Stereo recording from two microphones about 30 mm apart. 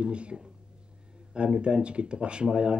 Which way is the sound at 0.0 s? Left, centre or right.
Right.